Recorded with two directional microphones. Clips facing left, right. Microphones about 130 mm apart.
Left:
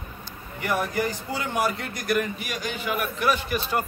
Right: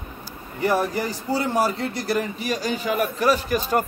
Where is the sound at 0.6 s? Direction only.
35° right (ahead or behind).